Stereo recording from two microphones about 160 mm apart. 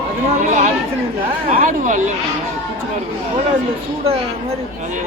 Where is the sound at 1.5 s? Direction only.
60° right (ahead or behind).